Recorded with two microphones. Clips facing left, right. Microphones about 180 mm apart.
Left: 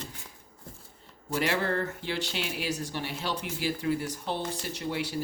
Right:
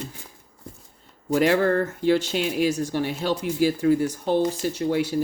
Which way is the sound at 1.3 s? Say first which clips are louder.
Right 9 dB; 50° right (ahead or behind).